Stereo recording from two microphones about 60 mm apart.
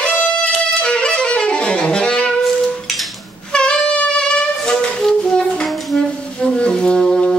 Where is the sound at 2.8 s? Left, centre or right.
Centre.